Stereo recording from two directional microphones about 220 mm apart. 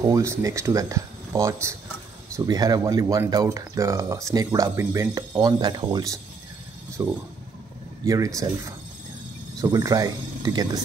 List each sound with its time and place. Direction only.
0.1 s speech: 10° right (ahead or behind)
9.6 s speech: 15° right (ahead or behind)